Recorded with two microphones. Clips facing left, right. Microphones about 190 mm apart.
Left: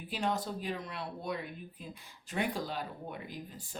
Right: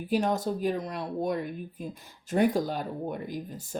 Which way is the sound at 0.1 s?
45° right (ahead or behind).